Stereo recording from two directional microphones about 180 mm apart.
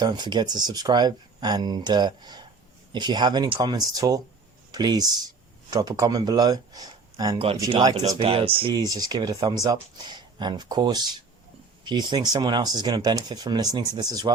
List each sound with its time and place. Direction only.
0.0 s speech: 25° right (ahead or behind)
7.3 s speech: 30° right (ahead or behind)
7.6 s speech: 20° right (ahead or behind)
7.9 s speech: 35° right (ahead or behind)